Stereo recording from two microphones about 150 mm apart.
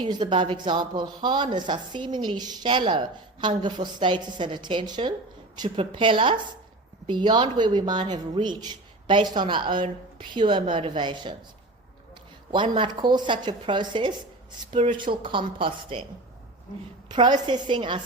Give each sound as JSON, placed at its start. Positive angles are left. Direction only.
{"t": 0.0, "sound": "speech", "side_deg": -30}
{"t": 12.5, "sound": "speech", "side_deg": -35}
{"t": 17.1, "sound": "speech", "side_deg": -30}